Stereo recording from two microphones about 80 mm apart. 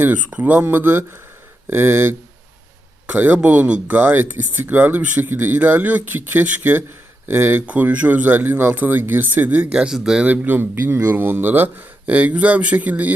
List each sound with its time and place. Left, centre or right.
0.3 s speech: centre
10.2 s speech: right